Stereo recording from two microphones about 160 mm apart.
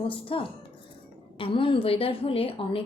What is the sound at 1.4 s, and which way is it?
A woman's voice, 35° left (ahead or behind).